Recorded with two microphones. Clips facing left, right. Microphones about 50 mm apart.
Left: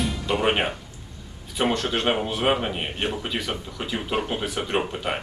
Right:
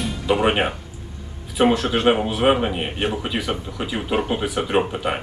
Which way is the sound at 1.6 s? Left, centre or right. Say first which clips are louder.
Right 6 dB; centre.